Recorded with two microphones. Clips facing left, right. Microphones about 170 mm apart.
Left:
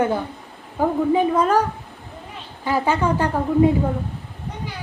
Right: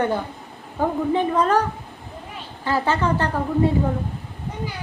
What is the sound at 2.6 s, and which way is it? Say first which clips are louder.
A woman's voice: left 1 dB; 15° left (ahead or behind).